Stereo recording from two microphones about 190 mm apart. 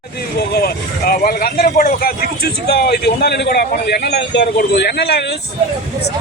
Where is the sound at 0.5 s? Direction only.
50° left (ahead or behind).